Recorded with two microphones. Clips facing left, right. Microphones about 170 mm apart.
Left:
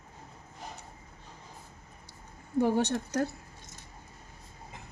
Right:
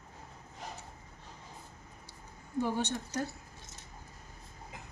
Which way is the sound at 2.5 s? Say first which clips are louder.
Left 6 dB; 55° left (ahead or behind).